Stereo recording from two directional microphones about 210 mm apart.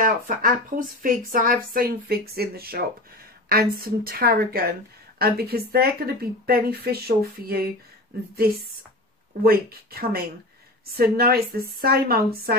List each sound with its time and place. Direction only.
0.0 s speech: 40° right (ahead or behind)
9.4 s speech: 45° right (ahead or behind)